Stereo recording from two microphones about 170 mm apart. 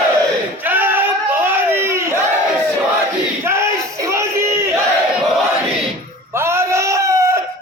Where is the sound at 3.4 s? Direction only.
15° right (ahead or behind).